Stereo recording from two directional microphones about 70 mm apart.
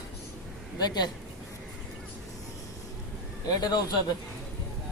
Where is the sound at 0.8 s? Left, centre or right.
Left.